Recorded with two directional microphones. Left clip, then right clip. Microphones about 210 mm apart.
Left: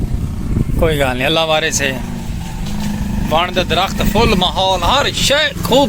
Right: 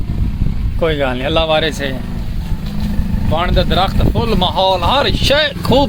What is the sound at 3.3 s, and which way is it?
Speech, 5° right (ahead or behind).